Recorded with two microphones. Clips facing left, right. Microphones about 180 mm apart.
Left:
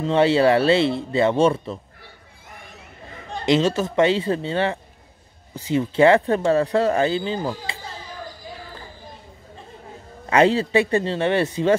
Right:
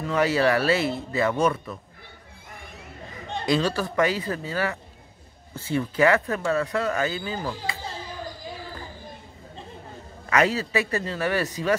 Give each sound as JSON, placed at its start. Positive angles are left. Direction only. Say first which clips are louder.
{"t": 0.0, "sound": "speech", "louder": "left 5 dB", "side_deg": 25}
{"t": 3.4, "sound": "speech", "louder": "left 5 dB", "side_deg": 20}
{"t": 5.5, "sound": "speech", "louder": "left 4 dB", "side_deg": 15}
{"t": 10.3, "sound": "speech", "louder": "left 6 dB", "side_deg": 30}